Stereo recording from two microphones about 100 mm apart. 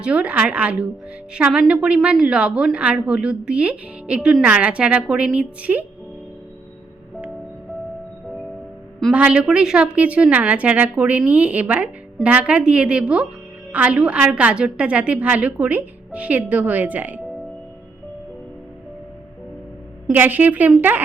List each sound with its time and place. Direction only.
0.0 s a woman's voice: 10° right (ahead or behind)
9.1 s a woman's voice: 10° right (ahead or behind)
20.1 s a woman's voice: 20° right (ahead or behind)